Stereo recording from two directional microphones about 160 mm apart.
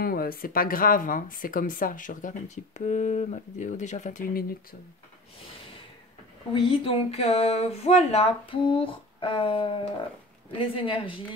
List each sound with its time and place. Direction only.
0.0 s speech: 65° left (ahead or behind)
6.5 s speech: 35° left (ahead or behind)